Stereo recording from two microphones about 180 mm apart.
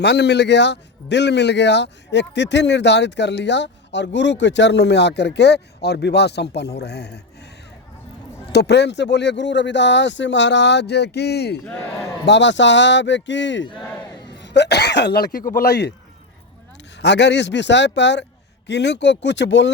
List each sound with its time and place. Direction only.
0.0 s a man's voice: 70° left (ahead or behind)
8.5 s a man's voice: 70° left (ahead or behind)
11.6 s a man's voice: 10° left (ahead or behind)
12.2 s a man's voice: 75° left (ahead or behind)
14.3 s a man's voice: 70° left (ahead or behind)
17.0 s a man's voice: 75° left (ahead or behind)